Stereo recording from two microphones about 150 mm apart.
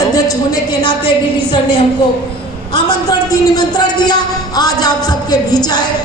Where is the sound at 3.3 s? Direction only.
25° left (ahead or behind).